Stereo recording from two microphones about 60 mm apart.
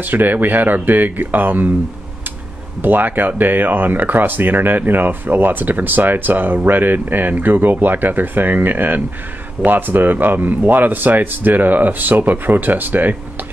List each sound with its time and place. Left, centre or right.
0.0 s speech: right
2.8 s speech: right